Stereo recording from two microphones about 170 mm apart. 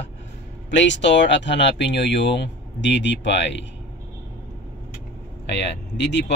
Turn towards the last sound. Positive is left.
turn(degrees=90)